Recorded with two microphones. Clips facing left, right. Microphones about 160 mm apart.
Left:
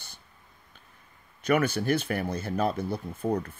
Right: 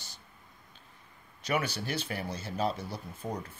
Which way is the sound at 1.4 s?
55° left (ahead or behind).